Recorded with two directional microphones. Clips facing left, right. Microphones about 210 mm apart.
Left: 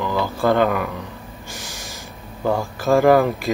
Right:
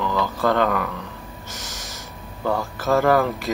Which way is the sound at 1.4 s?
10° left (ahead or behind).